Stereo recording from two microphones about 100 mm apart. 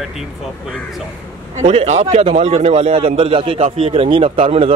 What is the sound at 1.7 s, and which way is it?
A man's voice, 90° right.